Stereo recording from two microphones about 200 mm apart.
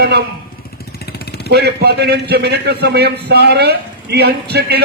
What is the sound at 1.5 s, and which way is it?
A man's voice, 55° right (ahead or behind).